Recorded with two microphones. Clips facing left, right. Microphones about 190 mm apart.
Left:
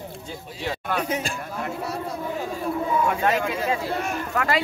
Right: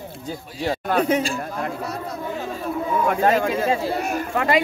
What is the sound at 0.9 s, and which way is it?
Speech, 60° right (ahead or behind).